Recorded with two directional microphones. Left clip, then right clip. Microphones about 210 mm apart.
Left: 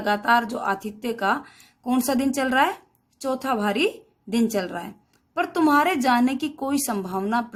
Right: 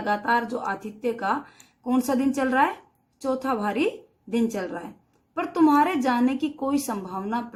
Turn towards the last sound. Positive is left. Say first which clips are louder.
# left 5 dB
turn(degrees=45)  # may be behind; listen again after turning